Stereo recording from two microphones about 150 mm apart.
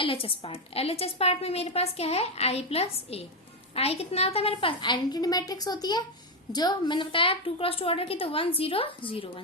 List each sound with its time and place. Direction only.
0.0 s a woman's voice: 35° left (ahead or behind)